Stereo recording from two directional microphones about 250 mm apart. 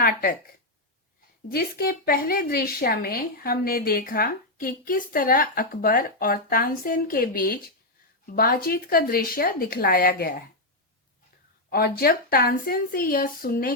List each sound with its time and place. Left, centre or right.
0.0 s speech: left
1.5 s speech: left
11.7 s speech: left